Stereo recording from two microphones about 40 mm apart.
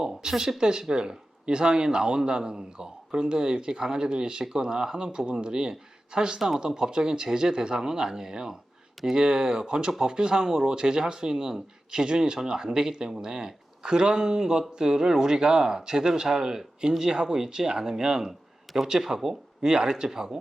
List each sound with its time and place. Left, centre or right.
0.2 s a man's voice: centre
19.7 s speech: centre